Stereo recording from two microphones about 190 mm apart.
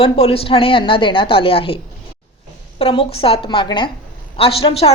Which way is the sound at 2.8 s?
30° left (ahead or behind).